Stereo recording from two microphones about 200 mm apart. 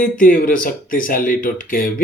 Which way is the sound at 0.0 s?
40° left (ahead or behind).